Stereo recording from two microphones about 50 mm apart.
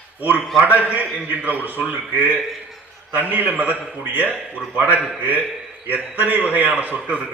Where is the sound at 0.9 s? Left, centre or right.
Right.